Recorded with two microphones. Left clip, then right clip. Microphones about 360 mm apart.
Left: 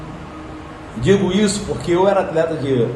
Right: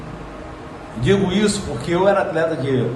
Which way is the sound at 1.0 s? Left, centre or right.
Centre.